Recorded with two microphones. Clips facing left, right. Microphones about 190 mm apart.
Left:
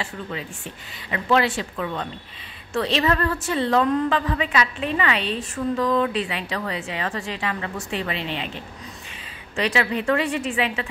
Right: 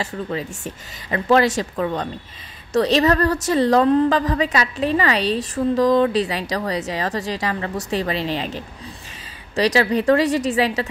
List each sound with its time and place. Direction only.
0.0 s a woman's voice: 40° right (ahead or behind)